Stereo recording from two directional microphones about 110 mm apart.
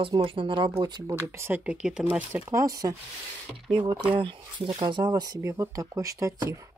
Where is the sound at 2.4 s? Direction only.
30° right (ahead or behind).